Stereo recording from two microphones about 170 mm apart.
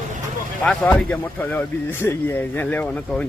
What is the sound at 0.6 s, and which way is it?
Speech, 5° left (ahead or behind).